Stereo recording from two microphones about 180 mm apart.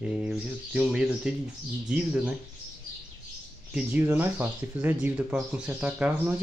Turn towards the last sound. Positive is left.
turn(degrees=-10)  # may be behind; listen again after turning